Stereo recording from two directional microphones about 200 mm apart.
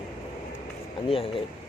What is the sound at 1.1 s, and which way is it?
Speech, 25° left (ahead or behind).